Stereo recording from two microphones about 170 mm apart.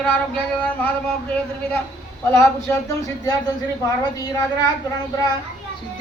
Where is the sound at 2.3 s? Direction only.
15° left (ahead or behind).